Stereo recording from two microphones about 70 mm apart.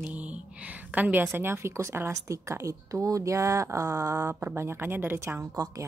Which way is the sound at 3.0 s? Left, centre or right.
Right.